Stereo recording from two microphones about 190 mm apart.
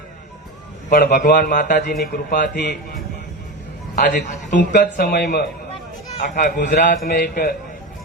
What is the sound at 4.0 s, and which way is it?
Speech, 65° left (ahead or behind).